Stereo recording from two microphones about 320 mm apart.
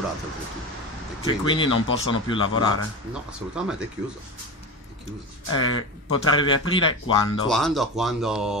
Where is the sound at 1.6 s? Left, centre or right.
Left.